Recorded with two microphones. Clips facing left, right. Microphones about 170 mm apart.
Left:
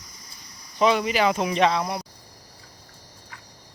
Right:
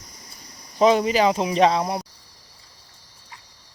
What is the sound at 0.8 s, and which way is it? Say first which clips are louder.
Speech: right 3 dB; 35° right (ahead or behind).